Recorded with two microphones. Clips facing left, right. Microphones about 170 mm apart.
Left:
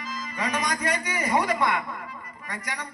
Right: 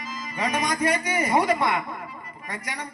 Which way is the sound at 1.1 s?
30° right (ahead or behind).